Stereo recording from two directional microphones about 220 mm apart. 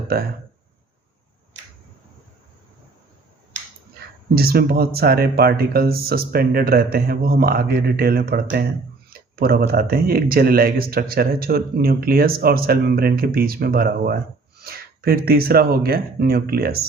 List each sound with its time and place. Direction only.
4.4 s a man's voice: 45° right (ahead or behind)